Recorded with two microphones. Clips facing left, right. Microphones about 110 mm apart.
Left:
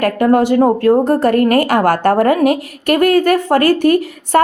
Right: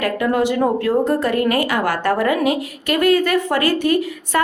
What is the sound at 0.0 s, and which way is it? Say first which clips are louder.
A woman's voice: left 6 dB; 45° left (ahead or behind).